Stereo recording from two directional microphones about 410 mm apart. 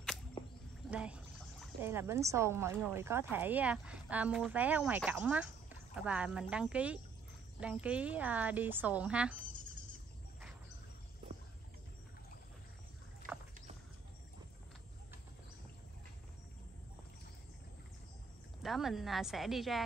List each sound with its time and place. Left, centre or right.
0.8 s speech: centre
18.6 s speech: centre